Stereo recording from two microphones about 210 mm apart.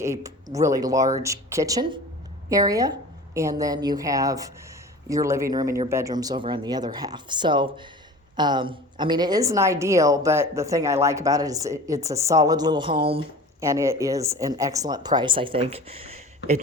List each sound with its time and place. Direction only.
0.0 s a woman's voice: 15° right (ahead or behind)
13.6 s speech: 15° right (ahead or behind); by 16.2 s 30° right (ahead or behind)